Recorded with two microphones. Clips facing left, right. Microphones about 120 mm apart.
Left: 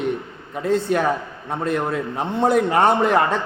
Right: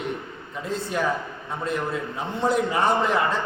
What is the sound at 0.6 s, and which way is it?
A man's voice, 60° left (ahead or behind).